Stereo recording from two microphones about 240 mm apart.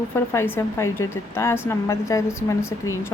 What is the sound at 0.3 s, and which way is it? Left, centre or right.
A woman's voice, centre.